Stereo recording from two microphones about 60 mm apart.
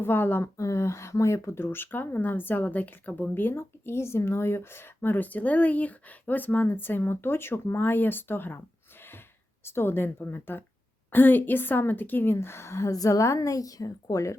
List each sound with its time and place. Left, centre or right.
0.0 s speech: left
0.5 s speech: left
3.3 s speech: left
9.6 s a woman's voice: left